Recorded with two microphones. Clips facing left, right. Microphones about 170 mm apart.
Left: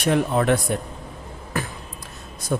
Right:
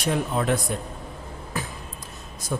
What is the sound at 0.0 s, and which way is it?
Speech, 65° left (ahead or behind).